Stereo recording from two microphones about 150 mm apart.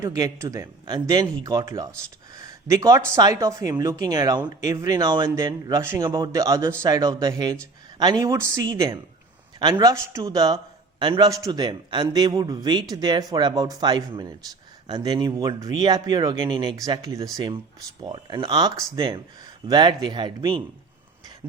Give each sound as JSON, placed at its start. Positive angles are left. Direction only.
{"t": 0.0, "sound": "a man's voice", "side_deg": -25}
{"t": 6.1, "sound": "a man's voice", "side_deg": -25}